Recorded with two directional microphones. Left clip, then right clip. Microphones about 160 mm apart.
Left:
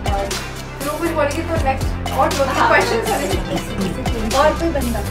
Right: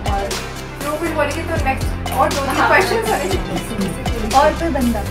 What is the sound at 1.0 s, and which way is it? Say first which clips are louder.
Speech: left 2 dB; centre (ahead or behind).